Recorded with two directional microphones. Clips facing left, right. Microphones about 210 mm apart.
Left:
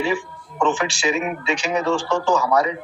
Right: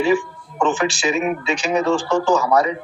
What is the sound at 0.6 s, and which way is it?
A man's voice, 40° right (ahead or behind).